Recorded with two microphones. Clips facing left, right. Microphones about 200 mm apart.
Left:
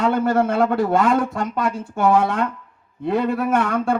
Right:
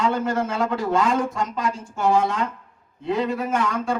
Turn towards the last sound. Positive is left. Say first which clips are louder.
# left 4 dB
turn(degrees=60)  # may be behind; listen again after turning